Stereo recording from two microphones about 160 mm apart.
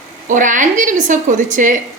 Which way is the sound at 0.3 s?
55° right (ahead or behind).